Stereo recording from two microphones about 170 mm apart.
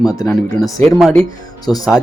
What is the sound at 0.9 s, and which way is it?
Speech, centre (ahead or behind).